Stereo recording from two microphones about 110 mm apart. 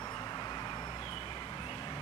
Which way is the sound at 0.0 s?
35° left (ahead or behind).